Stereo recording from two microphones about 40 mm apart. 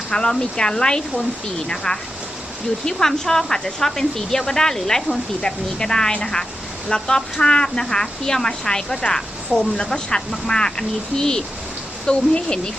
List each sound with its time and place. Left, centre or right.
0.1 s speech: centre